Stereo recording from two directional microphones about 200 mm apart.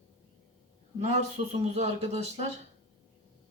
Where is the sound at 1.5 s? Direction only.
35° right (ahead or behind).